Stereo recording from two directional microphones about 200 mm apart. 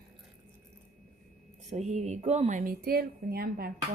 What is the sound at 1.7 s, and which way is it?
A woman's voice, 35° right (ahead or behind).